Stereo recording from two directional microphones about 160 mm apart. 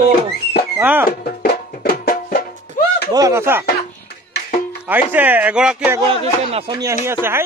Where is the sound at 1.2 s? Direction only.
65° left (ahead or behind).